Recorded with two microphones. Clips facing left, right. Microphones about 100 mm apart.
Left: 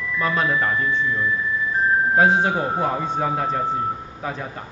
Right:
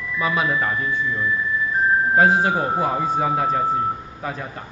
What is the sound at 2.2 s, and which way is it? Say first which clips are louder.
A man's voice: right 1 dB; centre (ahead or behind).